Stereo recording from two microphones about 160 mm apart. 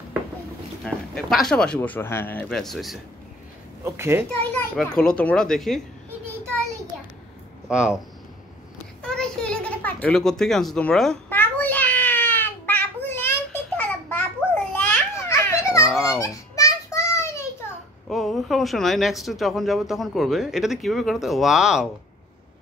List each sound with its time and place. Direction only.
0.8 s speech: 5° left (ahead or behind)
3.8 s a child's voice: 15° right (ahead or behind)
4.4 s a child's voice: 10° left (ahead or behind)
7.6 s speech: 5° right (ahead or behind)
9.0 s a sound: 5° left (ahead or behind)
13.7 s babbling: 10° left (ahead or behind)
14.8 s children playing: 15° left (ahead or behind)
16.2 s a sound: 20° left (ahead or behind)
18.0 s speech: centre (ahead or behind)